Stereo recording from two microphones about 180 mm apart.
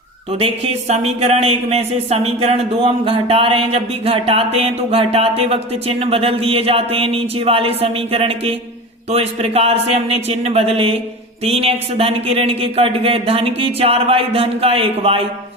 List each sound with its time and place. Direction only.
0.3 s speech: 35° right (ahead or behind)